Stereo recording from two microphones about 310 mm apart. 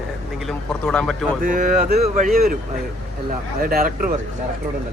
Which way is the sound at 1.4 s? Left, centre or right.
Right.